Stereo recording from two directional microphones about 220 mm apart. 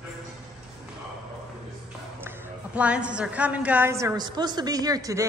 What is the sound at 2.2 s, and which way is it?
A woman's voice, 10° right (ahead or behind).